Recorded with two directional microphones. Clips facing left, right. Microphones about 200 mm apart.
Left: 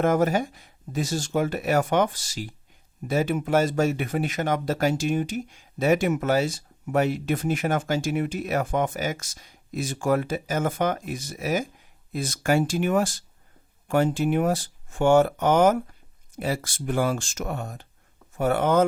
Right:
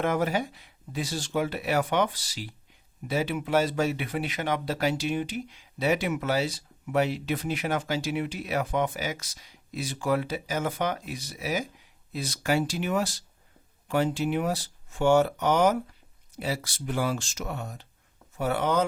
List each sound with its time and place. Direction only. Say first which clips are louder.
0.0 s speech: left 5 dB; 45° left (ahead or behind)